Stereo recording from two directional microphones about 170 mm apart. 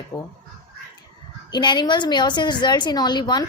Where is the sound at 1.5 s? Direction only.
25° left (ahead or behind).